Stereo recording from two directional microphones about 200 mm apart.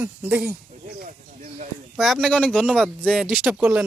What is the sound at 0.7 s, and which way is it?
Speech, 40° right (ahead or behind).